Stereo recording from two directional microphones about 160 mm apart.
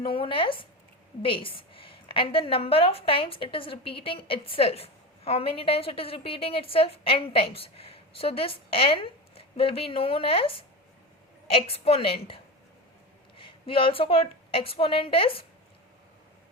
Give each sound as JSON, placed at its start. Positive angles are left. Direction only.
{"t": 0.0, "sound": "a woman's voice", "side_deg": 35}